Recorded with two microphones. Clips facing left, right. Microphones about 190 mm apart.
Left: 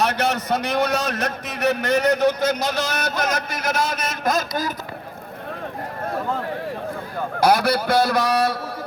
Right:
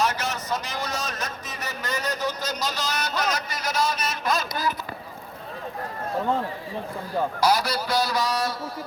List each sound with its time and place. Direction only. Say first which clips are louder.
0.0 s a man's voice: left 5 dB; 60° left (ahead or behind); by 4.7 s 45° left (ahead or behind)
7.3 s a man's voice: left 7 dB; 55° left (ahead or behind)